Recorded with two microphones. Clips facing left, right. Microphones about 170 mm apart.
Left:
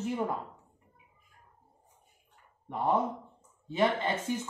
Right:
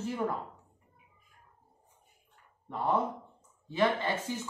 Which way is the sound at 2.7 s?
20° left (ahead or behind).